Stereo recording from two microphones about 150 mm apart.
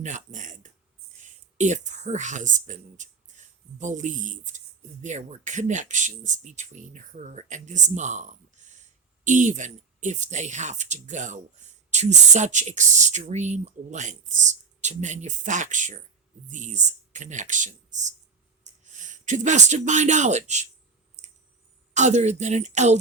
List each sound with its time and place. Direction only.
0.0 s a sound: 55° right (ahead or behind)
1.1 s speech: 55° right (ahead or behind)
21.9 s speech: 50° right (ahead or behind)